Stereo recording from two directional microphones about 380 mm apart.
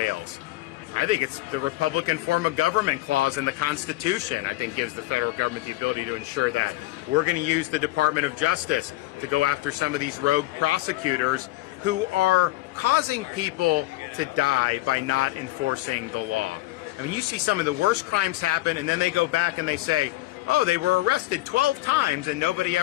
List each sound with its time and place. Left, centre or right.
0.9 s speech: right
17.1 s speech: right